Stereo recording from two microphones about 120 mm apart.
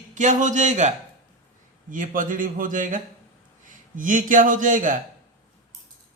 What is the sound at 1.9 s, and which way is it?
A man's voice, 90° right.